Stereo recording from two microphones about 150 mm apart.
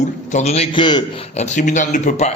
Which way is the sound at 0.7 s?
30° left (ahead or behind).